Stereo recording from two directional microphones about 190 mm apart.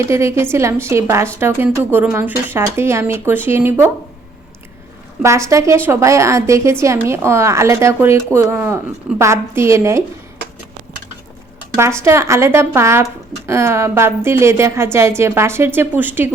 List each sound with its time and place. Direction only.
0.1 s speech: 15° right (ahead or behind)
5.2 s speech: 15° right (ahead or behind)
11.8 s speech: 15° right (ahead or behind)